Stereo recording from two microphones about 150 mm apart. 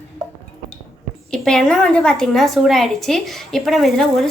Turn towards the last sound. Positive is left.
turn(degrees=0)  # may be behind; listen again after turning